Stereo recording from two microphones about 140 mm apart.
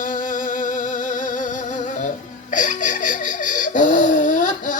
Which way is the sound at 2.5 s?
65° left (ahead or behind).